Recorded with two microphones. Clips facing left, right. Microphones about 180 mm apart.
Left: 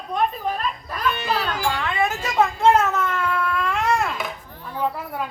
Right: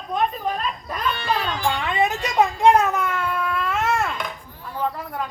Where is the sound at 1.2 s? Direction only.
5° left (ahead or behind).